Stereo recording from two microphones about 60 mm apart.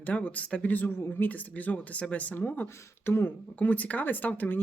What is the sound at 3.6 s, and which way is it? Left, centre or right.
Speech, left.